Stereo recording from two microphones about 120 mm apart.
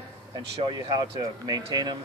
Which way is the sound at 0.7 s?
35° right (ahead or behind).